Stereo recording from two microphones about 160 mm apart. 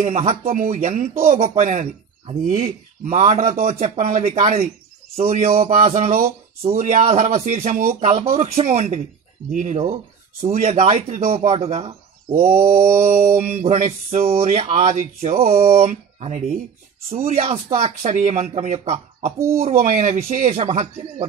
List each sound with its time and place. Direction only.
0.0 s speech: 50° right (ahead or behind)
1.4 s speech: 45° right (ahead or behind)
5.2 s speech: 60° right (ahead or behind); by 11.9 s 40° right (ahead or behind)
12.4 s speech: 60° right (ahead or behind)
13.7 s speech: 45° right (ahead or behind); by 15.4 s 60° right (ahead or behind)
15.4 s speech: 40° right (ahead or behind)